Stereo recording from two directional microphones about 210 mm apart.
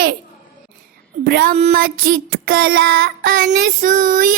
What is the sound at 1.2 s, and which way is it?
Speech, 50° right (ahead or behind).